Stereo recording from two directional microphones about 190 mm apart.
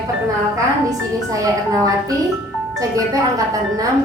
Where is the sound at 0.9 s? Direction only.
20° right (ahead or behind).